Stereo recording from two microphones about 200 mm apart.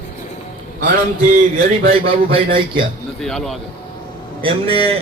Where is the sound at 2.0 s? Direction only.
25° right (ahead or behind).